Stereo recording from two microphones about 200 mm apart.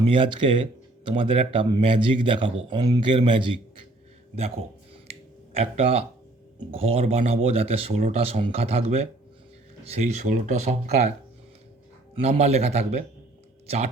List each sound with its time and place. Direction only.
0.1 s speech: 25° right (ahead or behind)
9.8 s speech: 30° right (ahead or behind)
12.1 s speech: 35° right (ahead or behind)